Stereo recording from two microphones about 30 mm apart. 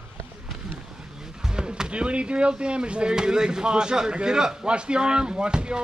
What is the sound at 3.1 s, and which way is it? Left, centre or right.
Speech, right.